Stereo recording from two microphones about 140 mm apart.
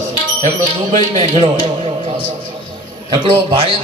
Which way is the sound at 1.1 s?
45° right (ahead or behind).